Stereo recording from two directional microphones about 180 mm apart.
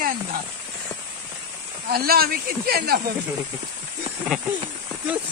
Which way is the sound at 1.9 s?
55° right (ahead or behind).